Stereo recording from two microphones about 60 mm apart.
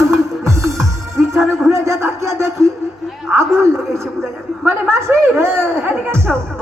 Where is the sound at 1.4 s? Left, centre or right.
Centre.